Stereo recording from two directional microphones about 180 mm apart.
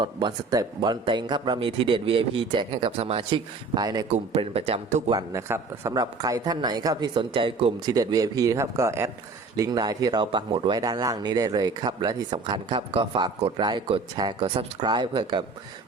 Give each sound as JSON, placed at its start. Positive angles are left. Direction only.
{"t": 0.0, "sound": "speech", "side_deg": -25}
{"t": 4.1, "sound": "speech", "side_deg": -35}
{"t": 5.1, "sound": "speech", "side_deg": -15}